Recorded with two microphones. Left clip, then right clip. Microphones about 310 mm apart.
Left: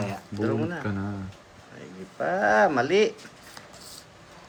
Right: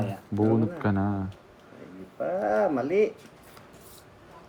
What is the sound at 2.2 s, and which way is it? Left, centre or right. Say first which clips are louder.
Speech: left 4 dB; left.